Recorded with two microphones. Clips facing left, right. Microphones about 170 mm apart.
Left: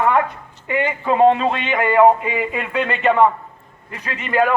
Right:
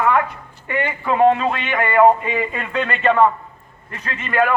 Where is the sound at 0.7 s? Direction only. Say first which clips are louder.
Left 2 dB; 15° left (ahead or behind).